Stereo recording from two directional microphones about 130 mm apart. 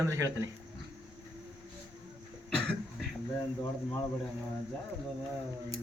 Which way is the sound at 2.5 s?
5° left (ahead or behind).